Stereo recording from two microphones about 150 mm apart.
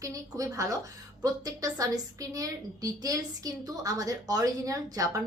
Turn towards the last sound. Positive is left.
turn(degrees=-25)  # may be behind; listen again after turning